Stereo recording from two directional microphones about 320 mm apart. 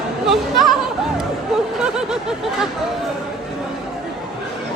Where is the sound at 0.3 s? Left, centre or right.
Centre.